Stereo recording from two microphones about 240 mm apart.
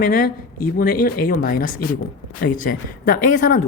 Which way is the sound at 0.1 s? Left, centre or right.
Left.